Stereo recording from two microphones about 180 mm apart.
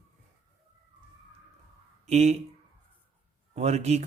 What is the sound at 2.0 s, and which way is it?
Speech, 35° right (ahead or behind).